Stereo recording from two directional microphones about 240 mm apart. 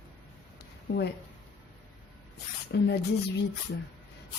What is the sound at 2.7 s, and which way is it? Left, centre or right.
Speech, left.